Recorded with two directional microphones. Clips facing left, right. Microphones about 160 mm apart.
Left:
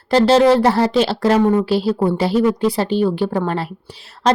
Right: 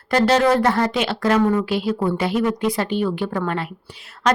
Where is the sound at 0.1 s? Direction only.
30° left (ahead or behind).